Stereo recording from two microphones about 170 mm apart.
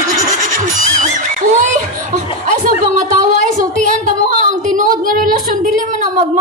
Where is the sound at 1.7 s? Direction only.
45° right (ahead or behind).